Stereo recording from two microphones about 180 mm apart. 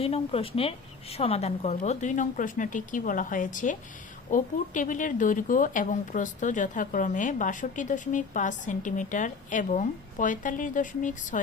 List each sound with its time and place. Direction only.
0.0 s speech: 35° left (ahead or behind)